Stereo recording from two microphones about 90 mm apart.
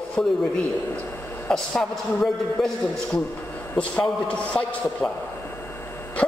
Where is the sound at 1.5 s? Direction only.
5° left (ahead or behind).